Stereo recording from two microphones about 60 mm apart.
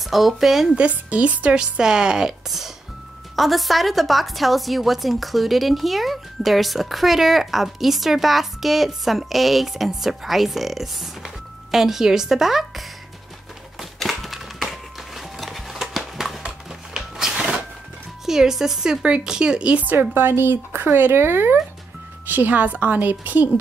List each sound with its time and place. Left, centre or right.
0.0 s a woman's voice: centre
0.7 s a woman's voice: right; by 12.8 s centre
13.7 s typewriter: centre
16.4 s a sound: centre
18.2 s a woman's voice: centre
19.9 s speech: right
22.3 s a woman's voice: right